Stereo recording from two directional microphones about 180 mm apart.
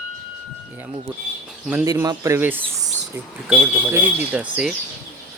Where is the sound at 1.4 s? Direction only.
Centre (ahead or behind).